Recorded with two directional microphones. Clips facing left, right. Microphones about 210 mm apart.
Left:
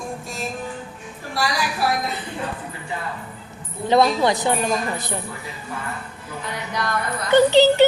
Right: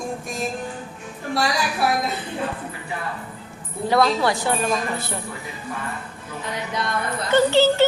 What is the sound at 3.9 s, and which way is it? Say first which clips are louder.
A woman's voice: left 2 dB; 20° left (ahead or behind).